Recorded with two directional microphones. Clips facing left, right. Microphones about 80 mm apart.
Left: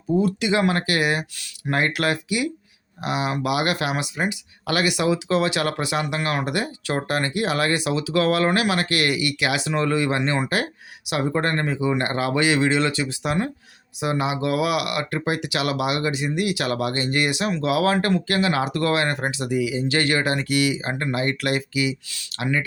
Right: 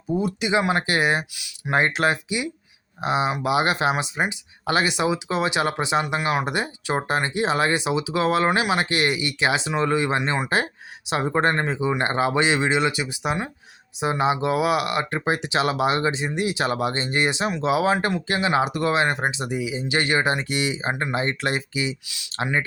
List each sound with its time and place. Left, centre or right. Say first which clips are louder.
0.1 s speech: left 2 dB; centre
10.5 s speech: right 1 dB; right
14.0 s speech: right 2 dB; right